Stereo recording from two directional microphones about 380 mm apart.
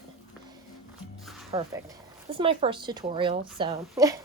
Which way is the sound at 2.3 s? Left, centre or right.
Centre.